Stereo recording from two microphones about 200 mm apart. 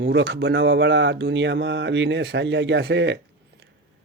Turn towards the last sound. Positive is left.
turn(degrees=-65)  # may be behind; listen again after turning